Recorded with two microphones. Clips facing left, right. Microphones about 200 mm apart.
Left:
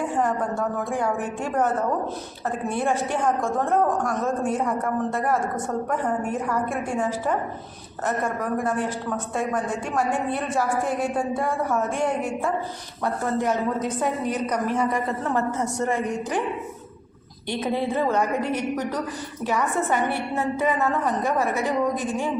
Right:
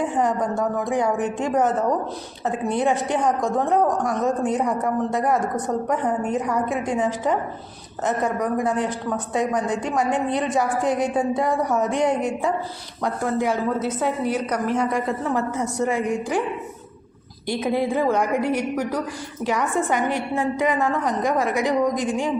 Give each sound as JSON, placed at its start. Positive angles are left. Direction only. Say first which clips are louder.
{"t": 0.9, "sound": "a woman's voice", "louder": "right 4 dB", "side_deg": -15}
{"t": 17.5, "sound": "a woman's voice", "louder": "right 3 dB", "side_deg": -10}